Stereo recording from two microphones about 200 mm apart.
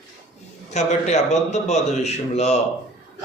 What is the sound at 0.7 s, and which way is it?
A man's voice, 35° left (ahead or behind).